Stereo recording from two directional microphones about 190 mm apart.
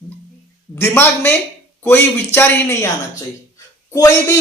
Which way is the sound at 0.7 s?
15° left (ahead or behind).